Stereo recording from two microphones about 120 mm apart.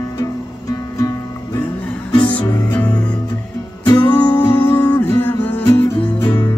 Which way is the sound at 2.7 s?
10° left (ahead or behind).